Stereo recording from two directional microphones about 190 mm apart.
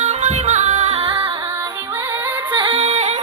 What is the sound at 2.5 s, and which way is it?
Music, 30° right (ahead or behind).